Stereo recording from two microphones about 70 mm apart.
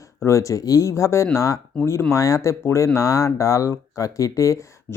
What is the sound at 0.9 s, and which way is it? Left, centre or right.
Speech, left.